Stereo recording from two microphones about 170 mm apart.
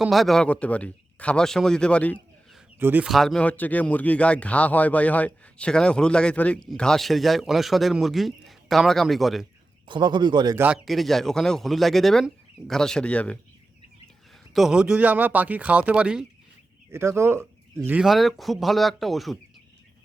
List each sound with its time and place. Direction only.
0.0 s speech: centre (ahead or behind)
2.7 s speech: 10° right (ahead or behind)
9.8 s speech: 25° right (ahead or behind)
10.6 s speech: 5° right (ahead or behind)
14.5 s speech: 5° right (ahead or behind)